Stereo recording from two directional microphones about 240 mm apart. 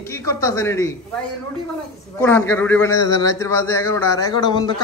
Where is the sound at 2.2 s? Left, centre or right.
Centre.